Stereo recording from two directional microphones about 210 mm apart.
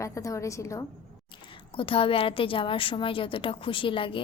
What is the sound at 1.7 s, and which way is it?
A woman's voice, 25° left (ahead or behind).